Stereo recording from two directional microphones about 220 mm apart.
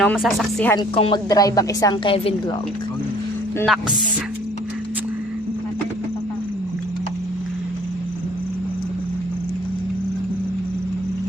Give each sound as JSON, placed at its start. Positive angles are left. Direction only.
{"t": 0.0, "sound": "speech", "side_deg": 0}
{"t": 0.9, "sound": "a woman's voice", "side_deg": 25}